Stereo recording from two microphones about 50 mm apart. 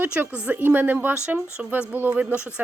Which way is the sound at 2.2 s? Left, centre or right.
Right.